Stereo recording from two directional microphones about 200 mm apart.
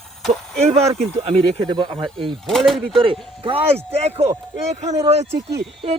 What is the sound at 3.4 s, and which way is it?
Speech, 25° right (ahead or behind).